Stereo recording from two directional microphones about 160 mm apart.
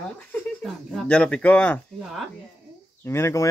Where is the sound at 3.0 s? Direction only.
15° left (ahead or behind).